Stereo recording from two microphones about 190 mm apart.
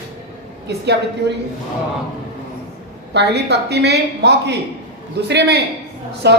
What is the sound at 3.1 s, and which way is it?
A woman's voice, 60° right (ahead or behind).